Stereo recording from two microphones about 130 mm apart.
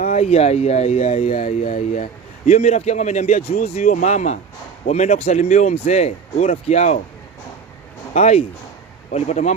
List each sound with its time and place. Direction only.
0.0 s a sound: 90° left
0.3 s speech: 55° left (ahead or behind)
1.3 s speech: 80° left
2.5 s speech: 55° left (ahead or behind)
8.1 s speech: 55° left (ahead or behind)